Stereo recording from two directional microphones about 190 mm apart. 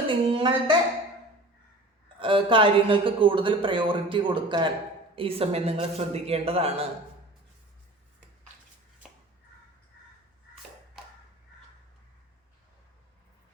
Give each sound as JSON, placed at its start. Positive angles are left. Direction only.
{"t": 0.1, "sound": "a woman's voice", "side_deg": -25}
{"t": 2.1, "sound": "a woman's voice", "side_deg": -25}
{"t": 9.0, "sound": "a sound", "side_deg": -5}